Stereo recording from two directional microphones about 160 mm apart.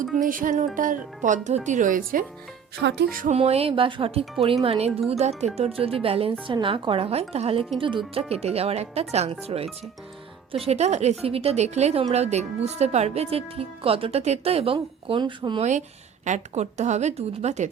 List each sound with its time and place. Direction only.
0.2 s music: 60° right (ahead or behind)
0.8 s a woman's voice: 55° right (ahead or behind)
2.7 s music: 90° right; by 3.3 s 60° right (ahead or behind)
3.3 s a woman's voice: 40° right (ahead or behind)
16.2 s a woman's voice: 45° right (ahead or behind)